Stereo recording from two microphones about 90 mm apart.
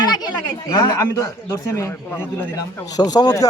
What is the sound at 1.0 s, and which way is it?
Speech, 30° left (ahead or behind).